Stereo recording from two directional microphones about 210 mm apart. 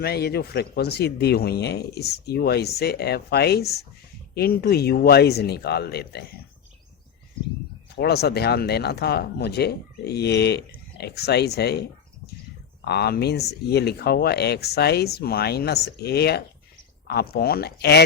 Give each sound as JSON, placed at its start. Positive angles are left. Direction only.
{"t": 0.0, "sound": "speech", "side_deg": 50}
{"t": 7.9, "sound": "speech", "side_deg": 50}